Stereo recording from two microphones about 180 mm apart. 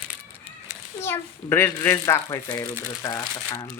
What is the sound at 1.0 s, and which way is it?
A child's voice, 15° left (ahead or behind).